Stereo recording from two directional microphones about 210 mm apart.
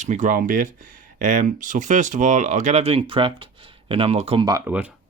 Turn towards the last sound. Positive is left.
turn(degrees=-20)  # may be behind; listen again after turning